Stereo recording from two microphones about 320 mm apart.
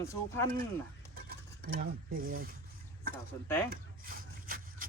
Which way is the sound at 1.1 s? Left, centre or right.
Right.